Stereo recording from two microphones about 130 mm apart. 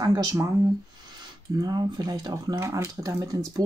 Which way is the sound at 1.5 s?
30° right (ahead or behind).